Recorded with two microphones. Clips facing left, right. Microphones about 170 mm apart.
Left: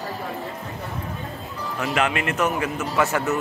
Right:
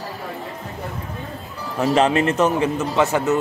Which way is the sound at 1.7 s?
35° right (ahead or behind).